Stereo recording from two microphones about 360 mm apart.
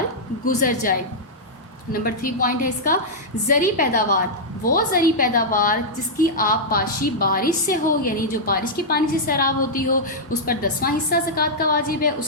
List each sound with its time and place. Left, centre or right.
0.4 s a woman's voice: left